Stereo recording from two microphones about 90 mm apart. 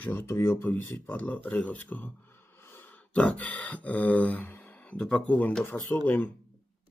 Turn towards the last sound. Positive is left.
turn(degrees=20)  # may be behind; listen again after turning